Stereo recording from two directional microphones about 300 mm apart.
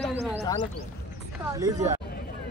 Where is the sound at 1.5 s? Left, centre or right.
Centre.